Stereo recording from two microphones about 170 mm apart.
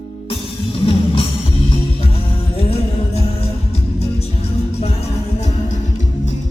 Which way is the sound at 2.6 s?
35° left (ahead or behind).